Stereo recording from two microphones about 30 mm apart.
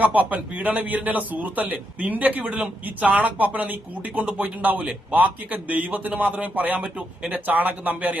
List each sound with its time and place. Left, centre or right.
0.0 s a man's voice: right